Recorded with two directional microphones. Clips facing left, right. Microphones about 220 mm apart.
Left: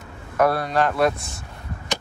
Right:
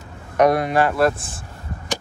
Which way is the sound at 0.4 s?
15° right (ahead or behind).